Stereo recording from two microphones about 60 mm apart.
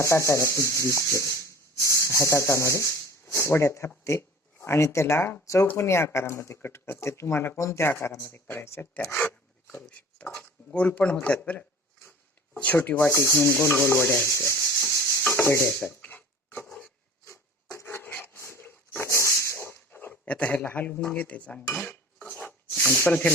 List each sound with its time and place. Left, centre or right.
0.0 s rub: left
1.1 s speech: left
9.1 s filing: centre
9.7 s speech: left
12.5 s rub: left
14.3 s speech: left
14.8 s rub: left
16.0 s a sound: left
17.7 s filing: left
18.0 s wood: left
18.3 s dog: left
20.2 s speech: centre
22.2 s filing: centre
22.9 s rub: left